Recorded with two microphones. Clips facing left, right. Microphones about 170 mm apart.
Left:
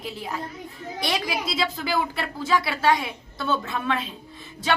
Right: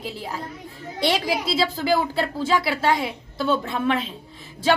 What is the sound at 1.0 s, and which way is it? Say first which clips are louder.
A woman's voice: right 5 dB; 30° right (ahead or behind).